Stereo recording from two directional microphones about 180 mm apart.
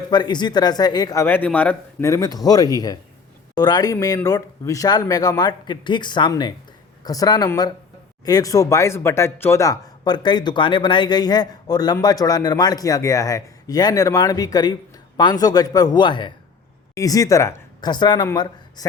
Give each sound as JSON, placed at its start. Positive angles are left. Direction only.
{"t": 0.1, "sound": "a man's voice", "side_deg": 25}